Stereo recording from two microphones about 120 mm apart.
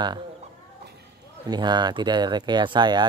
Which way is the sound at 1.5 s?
35° right (ahead or behind).